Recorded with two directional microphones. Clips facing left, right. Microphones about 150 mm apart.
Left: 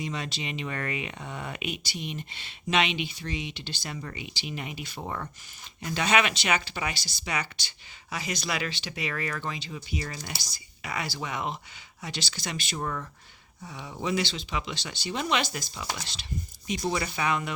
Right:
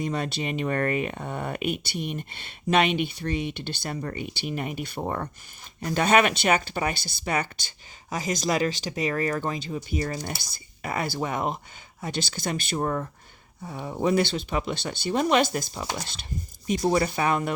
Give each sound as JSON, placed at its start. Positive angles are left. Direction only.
{"t": 0.0, "sound": "speech", "side_deg": -55}